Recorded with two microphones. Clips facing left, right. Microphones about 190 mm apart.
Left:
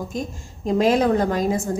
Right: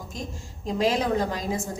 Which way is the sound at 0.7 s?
50° left (ahead or behind).